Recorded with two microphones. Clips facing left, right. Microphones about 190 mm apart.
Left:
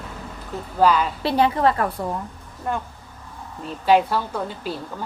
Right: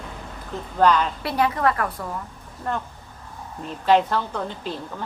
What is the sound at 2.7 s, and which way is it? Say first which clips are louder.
A woman's voice: left 1 dB; 10° left (ahead or behind).